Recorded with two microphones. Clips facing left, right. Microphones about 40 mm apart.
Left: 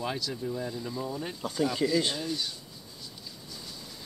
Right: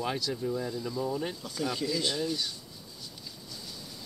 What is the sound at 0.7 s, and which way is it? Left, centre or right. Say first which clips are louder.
Speech: right 2 dB; left.